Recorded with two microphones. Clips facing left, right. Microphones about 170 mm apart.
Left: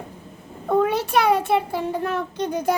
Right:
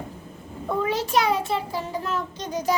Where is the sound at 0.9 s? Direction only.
60° left (ahead or behind).